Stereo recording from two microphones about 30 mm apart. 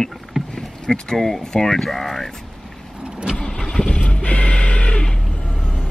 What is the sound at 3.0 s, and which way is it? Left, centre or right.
Vehicle, right.